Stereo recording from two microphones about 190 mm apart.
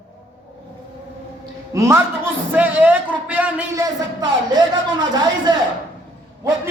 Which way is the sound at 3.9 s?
20° right (ahead or behind).